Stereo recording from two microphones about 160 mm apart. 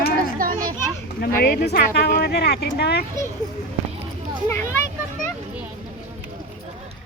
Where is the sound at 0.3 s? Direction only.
60° right (ahead or behind).